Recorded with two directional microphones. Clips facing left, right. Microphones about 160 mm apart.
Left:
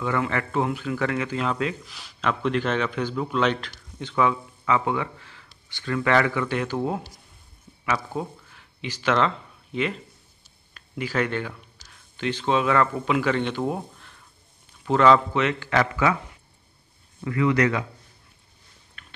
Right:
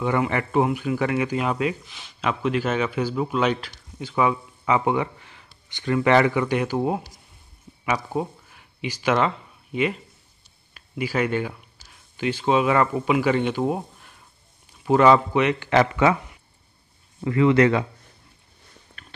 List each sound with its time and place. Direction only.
0.0 s a man's voice: 20° right (ahead or behind)
1.9 s a man's voice: centre (ahead or behind); by 16.2 s 25° right (ahead or behind)
17.2 s a man's voice: 25° right (ahead or behind)